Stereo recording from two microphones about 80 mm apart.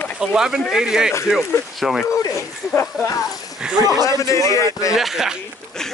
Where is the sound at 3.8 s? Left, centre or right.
Left.